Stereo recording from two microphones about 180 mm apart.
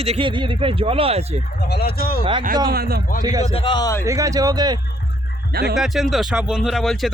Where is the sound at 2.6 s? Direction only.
55° right (ahead or behind).